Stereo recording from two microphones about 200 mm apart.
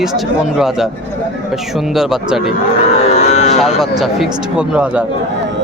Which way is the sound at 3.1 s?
35° left (ahead or behind).